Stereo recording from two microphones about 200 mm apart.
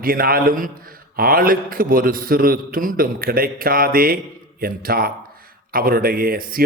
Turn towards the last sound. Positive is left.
turn(degrees=-50)  # may be behind; listen again after turning